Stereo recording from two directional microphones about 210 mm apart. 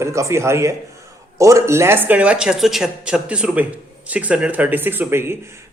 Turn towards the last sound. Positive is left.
turn(degrees=-10)  # may be behind; listen again after turning